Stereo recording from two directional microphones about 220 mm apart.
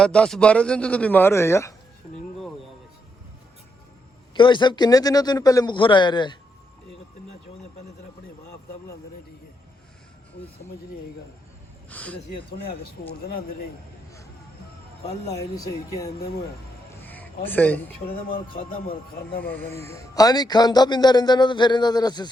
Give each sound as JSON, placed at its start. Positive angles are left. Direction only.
{"t": 0.0, "sound": "a man's voice", "side_deg": 5}
{"t": 4.4, "sound": "a man's voice", "side_deg": 20}
{"t": 11.9, "sound": "a sound", "side_deg": 5}
{"t": 12.5, "sound": "speech", "side_deg": 45}
{"t": 15.0, "sound": "speech", "side_deg": 15}
{"t": 17.0, "sound": "a sound", "side_deg": 10}
{"t": 18.1, "sound": "speech", "side_deg": 40}
{"t": 19.5, "sound": "a man's voice", "side_deg": 5}